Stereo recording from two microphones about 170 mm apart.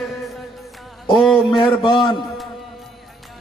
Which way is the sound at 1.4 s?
25° left (ahead or behind).